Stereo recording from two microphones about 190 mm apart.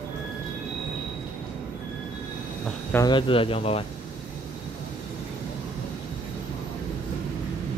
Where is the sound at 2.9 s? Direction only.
25° left (ahead or behind).